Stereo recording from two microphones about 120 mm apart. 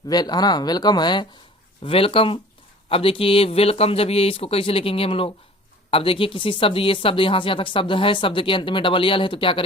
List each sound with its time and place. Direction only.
0.1 s speech: 35° left (ahead or behind)
1.8 s speech: 50° left (ahead or behind)